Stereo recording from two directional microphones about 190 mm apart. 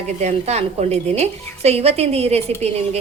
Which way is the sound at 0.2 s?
35° right (ahead or behind).